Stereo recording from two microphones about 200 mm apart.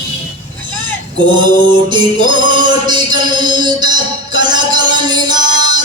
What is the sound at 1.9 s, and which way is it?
Music, 20° right (ahead or behind).